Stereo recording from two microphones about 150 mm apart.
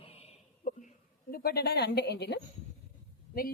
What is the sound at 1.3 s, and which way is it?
A woman's voice, 90° left.